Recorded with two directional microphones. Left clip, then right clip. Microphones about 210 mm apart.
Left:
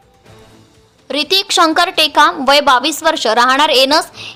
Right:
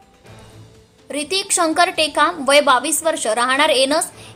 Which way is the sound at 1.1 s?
20° left (ahead or behind).